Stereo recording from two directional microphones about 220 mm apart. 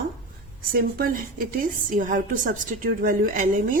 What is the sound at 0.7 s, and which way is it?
A woman's voice, 40° right (ahead or behind).